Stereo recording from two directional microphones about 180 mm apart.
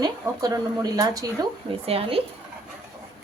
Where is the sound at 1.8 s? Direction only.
35° right (ahead or behind).